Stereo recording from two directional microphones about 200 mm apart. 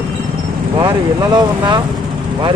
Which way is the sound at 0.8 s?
20° right (ahead or behind).